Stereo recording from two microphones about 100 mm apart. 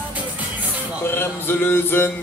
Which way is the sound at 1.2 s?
25° left (ahead or behind).